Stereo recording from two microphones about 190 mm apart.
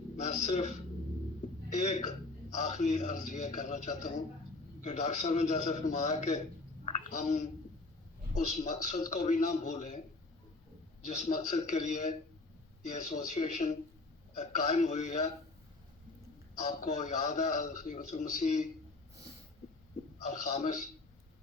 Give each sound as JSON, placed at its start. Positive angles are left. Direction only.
{"t": 0.2, "sound": "a man's voice", "side_deg": 40}
{"t": 1.7, "sound": "a man's voice", "side_deg": 40}
{"t": 6.8, "sound": "a sound", "side_deg": 40}
{"t": 8.3, "sound": "a man's voice", "side_deg": 40}
{"t": 11.0, "sound": "a man's voice", "side_deg": 40}
{"t": 16.6, "sound": "a man's voice", "side_deg": 40}
{"t": 20.2, "sound": "a man's voice", "side_deg": 40}